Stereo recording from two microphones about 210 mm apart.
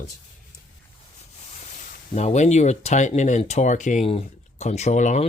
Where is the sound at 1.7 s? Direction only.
35° left (ahead or behind).